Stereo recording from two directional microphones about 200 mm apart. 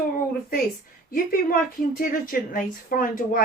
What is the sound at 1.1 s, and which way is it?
A woman's voice, 45° left (ahead or behind).